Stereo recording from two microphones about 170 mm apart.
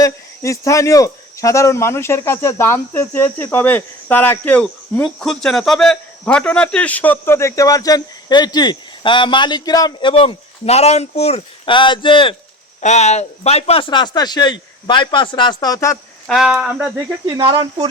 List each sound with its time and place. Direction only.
0.0 s speech: 20° left (ahead or behind)
12.8 s speech: 40° left (ahead or behind); by 16.0 s 20° left (ahead or behind)
16.2 s speech: centre (ahead or behind)
17.2 s speech: 30° right (ahead or behind)